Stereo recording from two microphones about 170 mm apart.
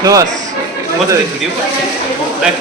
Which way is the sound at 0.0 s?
20° right (ahead or behind).